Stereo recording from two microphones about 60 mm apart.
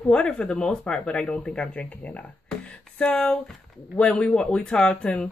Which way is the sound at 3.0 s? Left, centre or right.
Centre.